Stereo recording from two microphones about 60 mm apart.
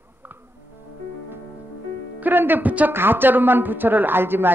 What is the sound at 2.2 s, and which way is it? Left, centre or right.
A woman's voice, right.